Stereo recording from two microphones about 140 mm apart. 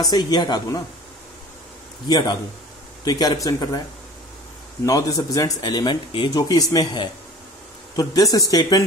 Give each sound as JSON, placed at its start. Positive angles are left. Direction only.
{"t": 0.1, "sound": "speech", "side_deg": 30}
{"t": 2.0, "sound": "speech", "side_deg": 30}
{"t": 4.8, "sound": "speech", "side_deg": 25}